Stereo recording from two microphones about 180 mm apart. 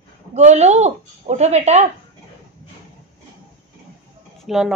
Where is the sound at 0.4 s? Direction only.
40° right (ahead or behind).